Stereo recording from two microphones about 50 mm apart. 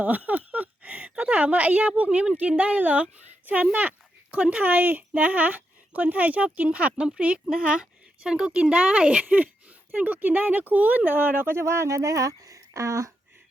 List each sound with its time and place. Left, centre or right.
0.0 s a sound: right
2.4 s speech: right
8.7 s speech: right
9.2 s a sound: right
9.9 s speech: right
11.5 s speech: right